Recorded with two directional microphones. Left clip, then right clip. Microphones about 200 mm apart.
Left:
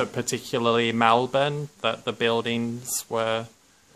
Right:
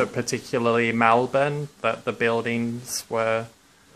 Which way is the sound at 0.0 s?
15° left (ahead or behind).